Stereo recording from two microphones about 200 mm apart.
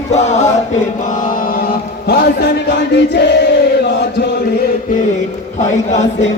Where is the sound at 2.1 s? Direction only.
55° left (ahead or behind).